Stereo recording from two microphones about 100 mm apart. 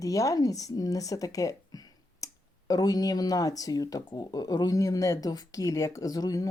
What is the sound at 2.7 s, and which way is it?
Speech, 40° left (ahead or behind).